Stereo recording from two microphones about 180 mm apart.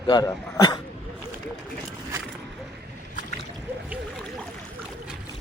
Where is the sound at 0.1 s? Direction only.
20° left (ahead or behind).